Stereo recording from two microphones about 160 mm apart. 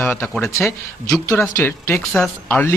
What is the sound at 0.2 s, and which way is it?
Speech, 5° left (ahead or behind).